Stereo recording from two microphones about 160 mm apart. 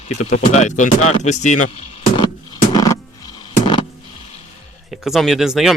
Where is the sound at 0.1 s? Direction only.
45° left (ahead or behind).